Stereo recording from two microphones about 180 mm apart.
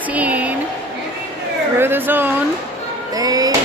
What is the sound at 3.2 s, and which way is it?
Music, 20° right (ahead or behind).